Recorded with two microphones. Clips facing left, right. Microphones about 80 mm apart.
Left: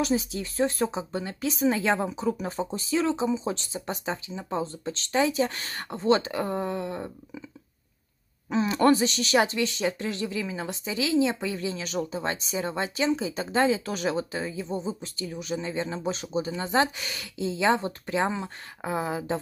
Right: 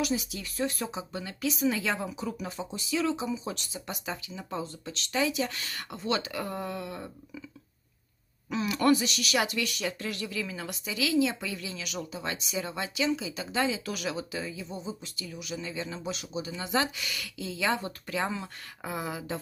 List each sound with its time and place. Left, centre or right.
0.0 s speech: left
8.5 s speech: left